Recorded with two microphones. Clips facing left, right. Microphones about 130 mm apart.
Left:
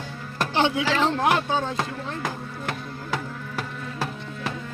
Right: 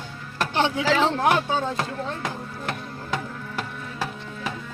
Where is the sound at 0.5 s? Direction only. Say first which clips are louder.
Even; 15° left (ahead or behind).